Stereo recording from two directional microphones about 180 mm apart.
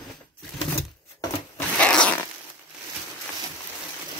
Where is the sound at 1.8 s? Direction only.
5° left (ahead or behind).